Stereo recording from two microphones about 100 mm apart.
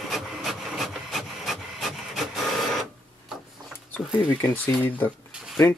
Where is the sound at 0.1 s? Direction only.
Centre (ahead or behind).